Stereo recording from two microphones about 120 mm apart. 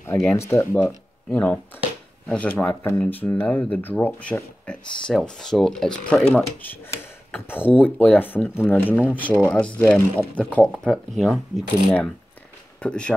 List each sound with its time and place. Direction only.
0.0 s speech: 15° left (ahead or behind)
12.8 s speech: 10° left (ahead or behind)